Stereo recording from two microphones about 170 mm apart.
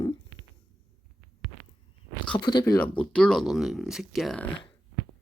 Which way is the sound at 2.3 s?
25° left (ahead or behind).